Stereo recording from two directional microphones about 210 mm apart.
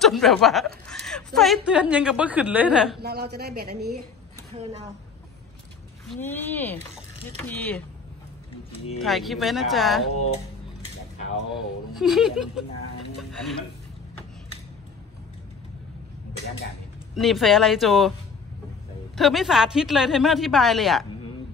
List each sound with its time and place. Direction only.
0.0 s a woman's voice: centre (ahead or behind)
3.0 s speech: 50° right (ahead or behind)
6.0 s speech: 10° left (ahead or behind)
9.0 s a woman's voice: centre (ahead or behind)
11.5 s a woman's voice: centre (ahead or behind)
17.1 s a woman's voice: centre (ahead or behind)
19.1 s a woman's voice: centre (ahead or behind)